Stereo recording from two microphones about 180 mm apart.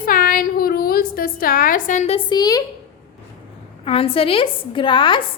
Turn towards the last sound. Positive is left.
turn(degrees=25)  # may be behind; listen again after turning